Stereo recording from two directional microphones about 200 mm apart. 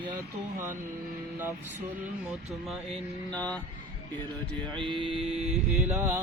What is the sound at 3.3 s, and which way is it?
Speech, 5° left (ahead or behind).